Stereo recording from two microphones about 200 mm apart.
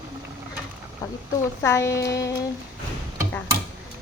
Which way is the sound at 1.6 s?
15° left (ahead or behind).